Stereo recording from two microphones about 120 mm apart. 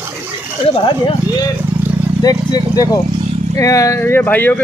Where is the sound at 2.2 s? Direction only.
30° left (ahead or behind).